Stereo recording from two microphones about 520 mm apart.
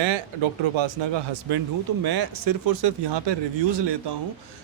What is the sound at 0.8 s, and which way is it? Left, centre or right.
Speech, right.